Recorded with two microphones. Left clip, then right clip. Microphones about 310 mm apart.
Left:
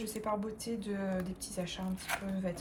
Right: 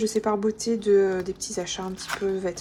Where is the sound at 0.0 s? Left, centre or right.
Right.